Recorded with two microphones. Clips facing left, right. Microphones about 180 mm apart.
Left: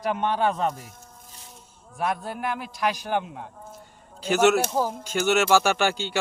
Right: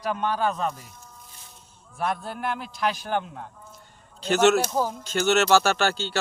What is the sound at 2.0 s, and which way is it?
Speech, 10° left (ahead or behind).